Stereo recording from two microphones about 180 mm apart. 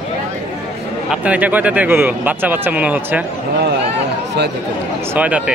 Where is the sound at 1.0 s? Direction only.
10° right (ahead or behind).